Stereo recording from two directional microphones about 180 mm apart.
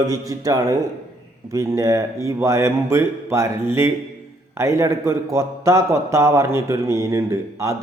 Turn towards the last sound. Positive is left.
turn(degrees=-15)  # may be behind; listen again after turning